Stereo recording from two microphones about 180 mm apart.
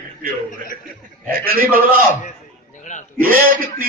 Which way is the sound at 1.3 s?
55° right (ahead or behind).